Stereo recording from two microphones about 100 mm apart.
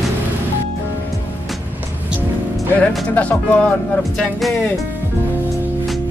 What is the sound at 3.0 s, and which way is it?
Music, 15° left (ahead or behind).